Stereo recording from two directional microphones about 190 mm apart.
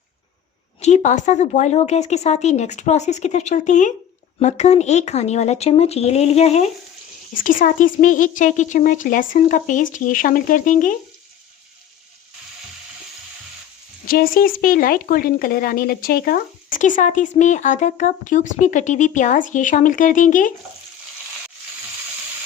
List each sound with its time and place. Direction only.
0.8 s speech: 40° left (ahead or behind)
7.4 s a woman's voice: 45° left (ahead or behind)
14.1 s a woman's voice: 50° left (ahead or behind)